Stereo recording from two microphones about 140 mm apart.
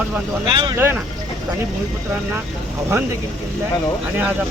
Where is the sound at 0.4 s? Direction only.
35° right (ahead or behind).